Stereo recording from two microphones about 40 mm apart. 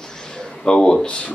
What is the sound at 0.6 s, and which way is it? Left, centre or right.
Speech, left.